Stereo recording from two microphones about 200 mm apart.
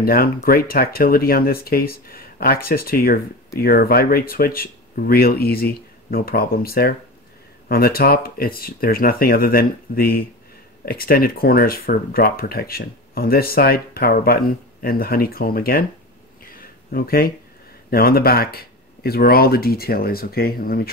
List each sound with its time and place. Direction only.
0.0 s speech: 45° left (ahead or behind)
16.4 s a sound: 45° left (ahead or behind)
17.8 s speech: 50° left (ahead or behind)